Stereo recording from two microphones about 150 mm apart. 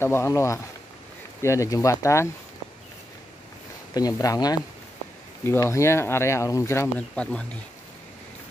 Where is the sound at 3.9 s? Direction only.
25° left (ahead or behind); by 7.6 s 10° left (ahead or behind).